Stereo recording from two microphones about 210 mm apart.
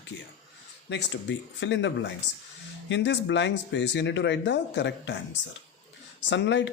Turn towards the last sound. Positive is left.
turn(degrees=60)  # may be behind; listen again after turning